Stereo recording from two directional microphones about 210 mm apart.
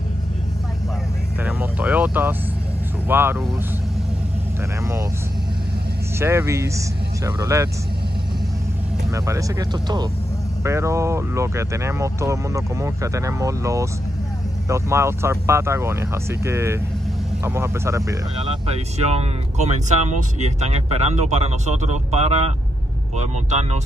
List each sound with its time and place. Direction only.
1.4 s vehicle: 5° right (ahead or behind)
3.1 s speech: 10° right (ahead or behind)
6.1 s speech: 10° right (ahead or behind)
9.1 s speech: 15° right (ahead or behind)
18.7 s speech: 30° right (ahead or behind)